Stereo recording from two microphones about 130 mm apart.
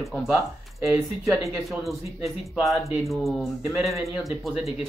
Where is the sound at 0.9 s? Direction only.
25° right (ahead or behind).